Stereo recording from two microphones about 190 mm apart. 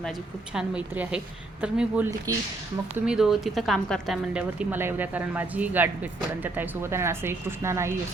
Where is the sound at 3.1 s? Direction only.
Centre (ahead or behind).